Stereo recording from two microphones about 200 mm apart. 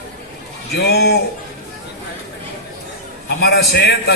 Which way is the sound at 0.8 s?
55° left (ahead or behind).